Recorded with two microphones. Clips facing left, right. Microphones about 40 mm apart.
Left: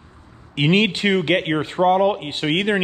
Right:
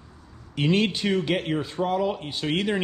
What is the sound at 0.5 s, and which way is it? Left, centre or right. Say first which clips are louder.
A man's voice: left 5 dB; left.